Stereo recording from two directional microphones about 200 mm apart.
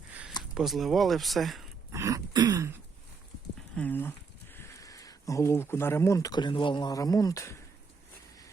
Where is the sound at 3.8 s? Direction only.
10° left (ahead or behind).